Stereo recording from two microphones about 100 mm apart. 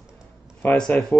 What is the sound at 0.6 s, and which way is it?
Speech, 5° left (ahead or behind).